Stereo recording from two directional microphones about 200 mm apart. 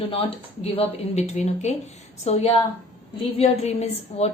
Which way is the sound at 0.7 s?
30° left (ahead or behind).